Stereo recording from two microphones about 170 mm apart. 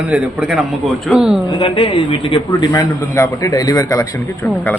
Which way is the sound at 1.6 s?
30° left (ahead or behind).